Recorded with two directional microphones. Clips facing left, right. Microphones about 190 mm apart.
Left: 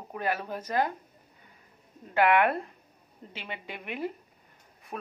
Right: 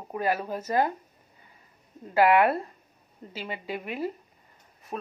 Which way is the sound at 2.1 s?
35° right (ahead or behind).